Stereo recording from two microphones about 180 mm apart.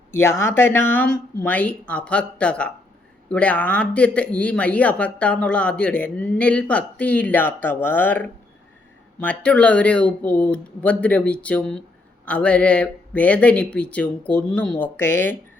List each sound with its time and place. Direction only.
0.1 s speech: 15° left (ahead or behind)